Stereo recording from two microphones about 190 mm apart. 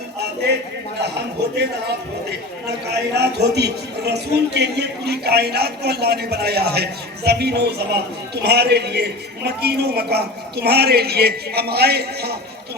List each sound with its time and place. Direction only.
1.4 s a man's voice: 60° right (ahead or behind)
2.6 s a man's voice: 60° right (ahead or behind)